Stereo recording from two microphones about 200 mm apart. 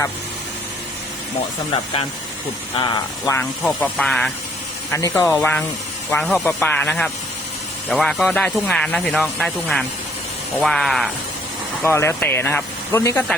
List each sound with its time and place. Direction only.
2.7 s speech: 20° left (ahead or behind); by 4.3 s 5° left (ahead or behind)
4.9 s speech: 15° left (ahead or behind)
11.8 s speech: 10° left (ahead or behind)